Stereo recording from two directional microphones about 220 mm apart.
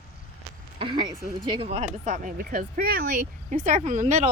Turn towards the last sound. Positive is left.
turn(degrees=-35)  # may be behind; listen again after turning